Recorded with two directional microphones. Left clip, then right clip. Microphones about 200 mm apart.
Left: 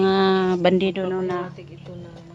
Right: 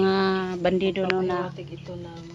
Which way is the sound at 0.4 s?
55° left (ahead or behind).